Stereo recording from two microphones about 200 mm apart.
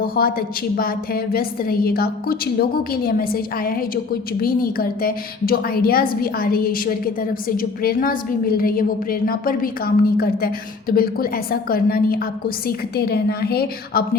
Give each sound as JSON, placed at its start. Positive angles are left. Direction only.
{"t": 0.0, "sound": "a woman's voice", "side_deg": 45}